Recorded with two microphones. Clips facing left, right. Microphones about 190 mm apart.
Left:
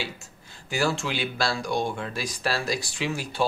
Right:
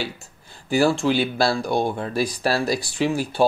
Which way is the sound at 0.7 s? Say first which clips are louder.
Right 8 dB; 35° right (ahead or behind).